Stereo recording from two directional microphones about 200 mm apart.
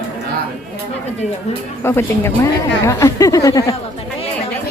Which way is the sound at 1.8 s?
10° left (ahead or behind).